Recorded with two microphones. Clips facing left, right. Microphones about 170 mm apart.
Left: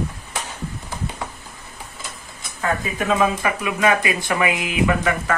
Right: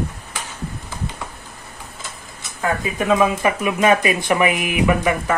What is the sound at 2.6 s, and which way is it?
Speech, 15° right (ahead or behind).